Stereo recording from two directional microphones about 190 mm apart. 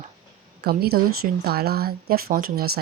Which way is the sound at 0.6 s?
55° right (ahead or behind).